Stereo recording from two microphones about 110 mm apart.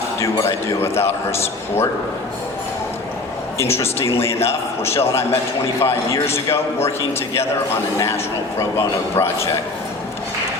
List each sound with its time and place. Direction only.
0.2 s a man's voice: 25° left (ahead or behind)
3.6 s a man's voice: 25° left (ahead or behind)
7.9 s a man's voice: 25° left (ahead or behind)